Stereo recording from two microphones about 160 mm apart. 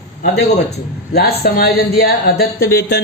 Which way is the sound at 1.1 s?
85° left.